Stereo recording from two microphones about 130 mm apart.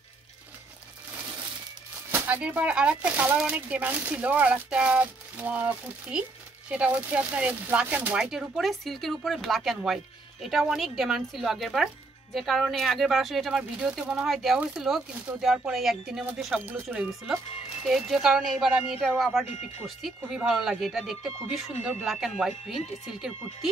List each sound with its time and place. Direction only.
2.0 s speech: 15° right (ahead or behind)
16.6 s speech: 15° right (ahead or behind)
17.3 s speech: 5° right (ahead or behind)
19.4 s speech: 60° left (ahead or behind)
20.2 s speech: 5° right (ahead or behind)